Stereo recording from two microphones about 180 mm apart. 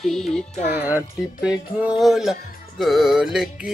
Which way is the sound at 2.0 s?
Centre (ahead or behind).